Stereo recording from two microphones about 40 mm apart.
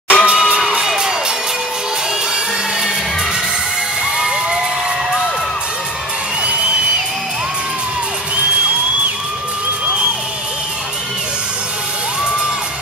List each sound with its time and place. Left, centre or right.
0.1 s crowd: right
0.8 s music: centre